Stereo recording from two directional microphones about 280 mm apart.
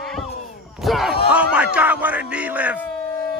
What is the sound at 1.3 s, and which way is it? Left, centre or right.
Music, centre.